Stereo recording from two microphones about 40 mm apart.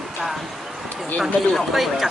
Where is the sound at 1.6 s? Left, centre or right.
Centre.